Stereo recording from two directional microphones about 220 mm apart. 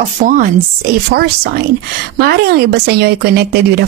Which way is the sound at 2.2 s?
45° right (ahead or behind).